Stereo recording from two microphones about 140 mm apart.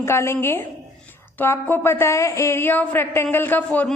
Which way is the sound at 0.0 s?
20° left (ahead or behind).